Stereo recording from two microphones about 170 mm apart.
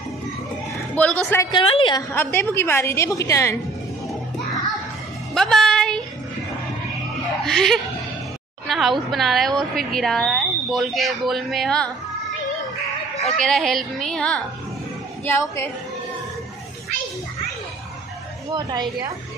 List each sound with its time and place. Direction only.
0.9 s a man's voice: 10° left (ahead or behind)
1.5 s a woman's voice: 30° left (ahead or behind)
2.1 s a woman's voice: 10° left (ahead or behind)
5.3 s music: 5° left (ahead or behind)
7.4 s speech: centre (ahead or behind)
13.3 s speech: centre (ahead or behind)
18.5 s a woman's voice: 20° right (ahead or behind)